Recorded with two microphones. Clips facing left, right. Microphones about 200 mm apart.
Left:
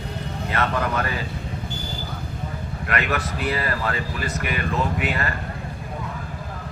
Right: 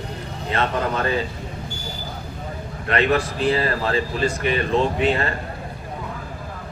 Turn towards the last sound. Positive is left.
turn(degrees=-30)  # may be behind; listen again after turning